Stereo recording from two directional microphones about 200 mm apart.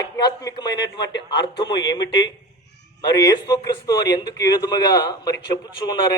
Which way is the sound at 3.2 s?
20° left (ahead or behind).